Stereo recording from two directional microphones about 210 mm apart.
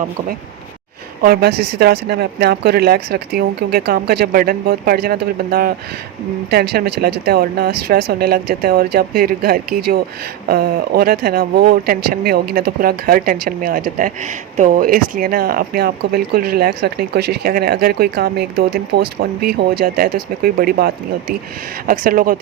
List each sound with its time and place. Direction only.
1.2 s speech: 45° right (ahead or behind)